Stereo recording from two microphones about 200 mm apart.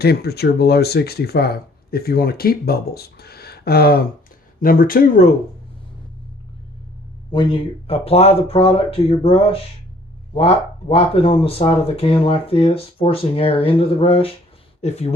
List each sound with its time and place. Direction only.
0.0 s speech: 50° left (ahead or behind)
7.3 s speech: 25° left (ahead or behind)